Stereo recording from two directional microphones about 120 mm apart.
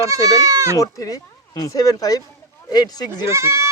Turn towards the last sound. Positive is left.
turn(degrees=-25)  # may be behind; listen again after turning